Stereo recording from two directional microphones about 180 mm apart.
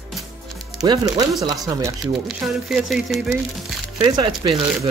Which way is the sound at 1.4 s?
20° right (ahead or behind).